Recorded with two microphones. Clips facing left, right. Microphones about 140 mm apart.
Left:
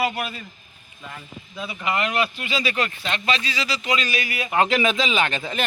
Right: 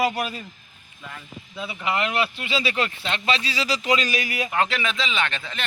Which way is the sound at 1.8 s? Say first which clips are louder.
Left 1 dB; 25° right (ahead or behind).